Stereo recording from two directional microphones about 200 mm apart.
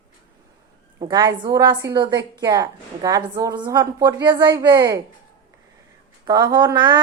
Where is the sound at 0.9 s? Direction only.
20° right (ahead or behind).